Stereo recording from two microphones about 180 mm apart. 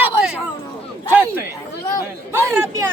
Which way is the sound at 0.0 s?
5° right (ahead or behind).